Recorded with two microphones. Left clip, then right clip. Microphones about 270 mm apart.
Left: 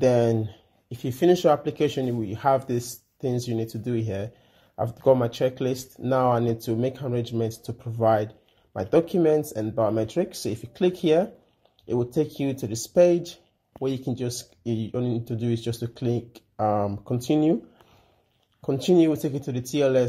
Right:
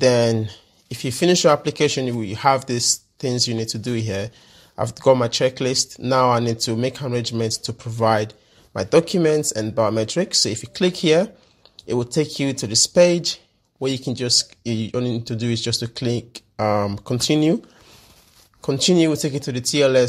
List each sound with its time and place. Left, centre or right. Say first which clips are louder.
0.0 s speech: right 4 dB; right
18.6 s speech: right 3 dB; right